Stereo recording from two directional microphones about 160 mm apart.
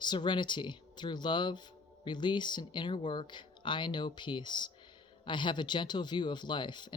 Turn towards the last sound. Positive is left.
turn(degrees=30)  # may be behind; listen again after turning